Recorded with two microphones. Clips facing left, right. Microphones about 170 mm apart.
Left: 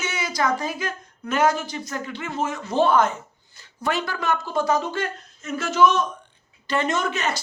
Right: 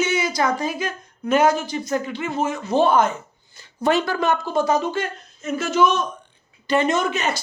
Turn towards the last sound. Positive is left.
turn(degrees=-10)  # may be behind; listen again after turning